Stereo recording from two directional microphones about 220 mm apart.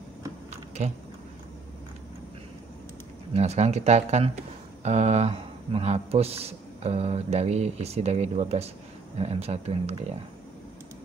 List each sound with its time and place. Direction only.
0.8 s a man's voice: 30° right (ahead or behind)
3.3 s a man's voice: 30° right (ahead or behind)